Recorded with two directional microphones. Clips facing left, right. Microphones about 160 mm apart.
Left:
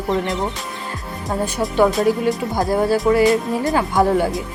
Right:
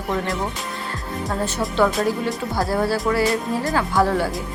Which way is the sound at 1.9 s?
Centre (ahead or behind).